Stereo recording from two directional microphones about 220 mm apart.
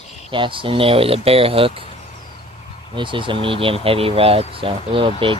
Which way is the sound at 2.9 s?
20° right (ahead or behind).